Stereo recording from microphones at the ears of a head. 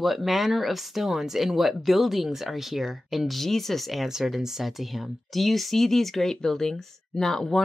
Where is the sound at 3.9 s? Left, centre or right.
Centre.